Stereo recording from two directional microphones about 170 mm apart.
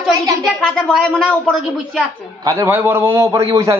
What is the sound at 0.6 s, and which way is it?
Speech, 5° left (ahead or behind).